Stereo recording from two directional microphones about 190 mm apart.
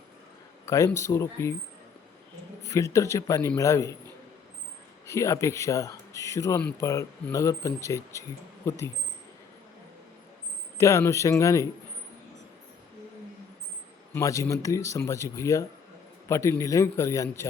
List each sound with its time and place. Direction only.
0.6 s speech: 15° left (ahead or behind)
2.6 s speech: 15° left (ahead or behind)
5.0 s speech: 15° left (ahead or behind)
10.8 s speech: 15° left (ahead or behind)
14.1 s speech: 15° left (ahead or behind)